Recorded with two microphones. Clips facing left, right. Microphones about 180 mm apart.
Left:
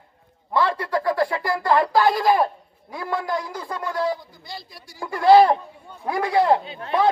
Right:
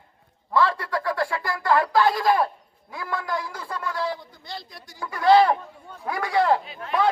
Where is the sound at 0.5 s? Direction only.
25° left (ahead or behind).